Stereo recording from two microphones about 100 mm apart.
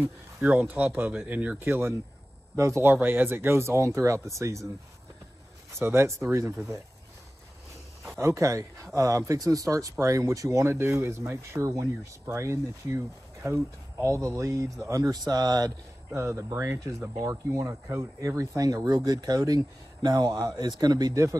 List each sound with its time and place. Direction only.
0.0 s speech: 15° right (ahead or behind); by 4.6 s 30° right (ahead or behind)
5.8 s speech: 25° right (ahead or behind)
8.0 s speech: 30° right (ahead or behind)
16.2 s speech: 25° right (ahead or behind)